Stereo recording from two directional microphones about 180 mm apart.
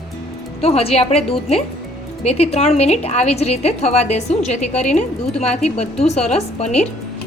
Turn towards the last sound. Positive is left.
turn(degrees=35)  # may be behind; listen again after turning